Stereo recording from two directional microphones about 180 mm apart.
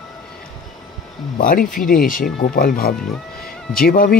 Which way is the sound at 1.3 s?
50° left (ahead or behind).